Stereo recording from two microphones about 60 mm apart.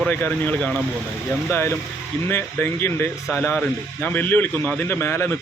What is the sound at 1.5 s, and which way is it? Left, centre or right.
A man's voice, left.